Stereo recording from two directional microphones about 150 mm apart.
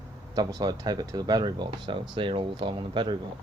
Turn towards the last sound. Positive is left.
turn(degrees=-30)  # may be behind; listen again after turning